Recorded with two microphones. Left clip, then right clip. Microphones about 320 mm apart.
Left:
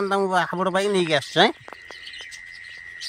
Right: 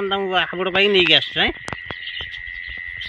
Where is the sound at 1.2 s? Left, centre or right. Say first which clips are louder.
Left 1 dB; left.